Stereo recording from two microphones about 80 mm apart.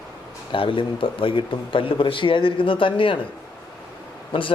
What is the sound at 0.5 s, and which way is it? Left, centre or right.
Speech, left.